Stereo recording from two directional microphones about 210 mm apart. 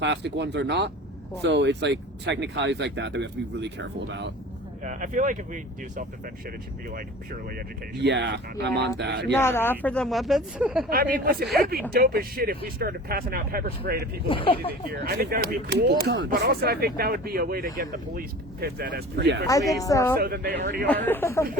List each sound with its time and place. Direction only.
0.0 s speech: 55° right (ahead or behind)
4.8 s speech: 35° right (ahead or behind)
8.0 s speech: 55° right (ahead or behind)
9.3 s speech: 10° left (ahead or behind); by 10.8 s 5° right (ahead or behind)
10.8 s speech: 45° right (ahead or behind)
14.3 s speech: 25° left (ahead or behind)
14.7 s speech: 50° right (ahead or behind)
19.5 s speech: 15° left (ahead or behind)
20.1 s speech: 45° right (ahead or behind)
20.8 s speech: 10° left (ahead or behind)